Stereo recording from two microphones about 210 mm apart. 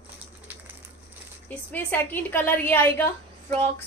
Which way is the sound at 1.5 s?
10° left (ahead or behind).